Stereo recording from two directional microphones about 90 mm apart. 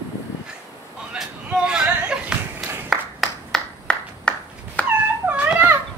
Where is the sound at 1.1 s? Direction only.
10° right (ahead or behind).